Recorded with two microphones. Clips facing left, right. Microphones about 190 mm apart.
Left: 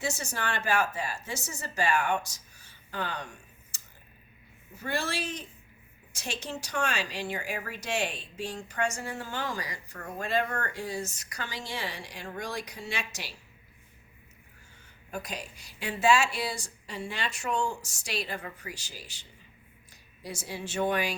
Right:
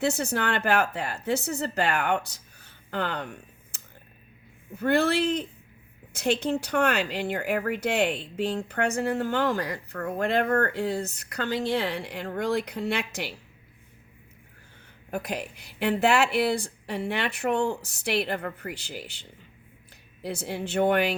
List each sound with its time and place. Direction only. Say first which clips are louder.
0.0 s speech: right 8 dB; 60° right (ahead or behind)
4.8 s speech: right 10 dB; 60° right (ahead or behind)
15.1 s speech: right 6 dB; 60° right (ahead or behind)
20.2 s speech: right 6 dB; 60° right (ahead or behind)